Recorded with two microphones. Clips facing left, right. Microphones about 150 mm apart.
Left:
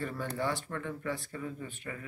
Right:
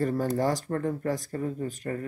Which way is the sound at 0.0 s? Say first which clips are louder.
Right 9 dB; 40° right (ahead or behind).